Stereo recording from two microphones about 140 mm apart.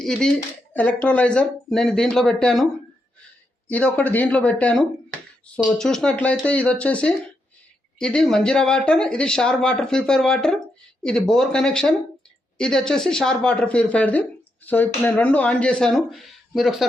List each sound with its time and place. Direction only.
0.0 s speech: 5° left (ahead or behind)
3.7 s speech: 10° left (ahead or behind)